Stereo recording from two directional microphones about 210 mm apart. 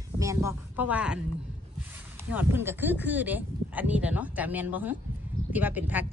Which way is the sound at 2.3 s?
10° right (ahead or behind).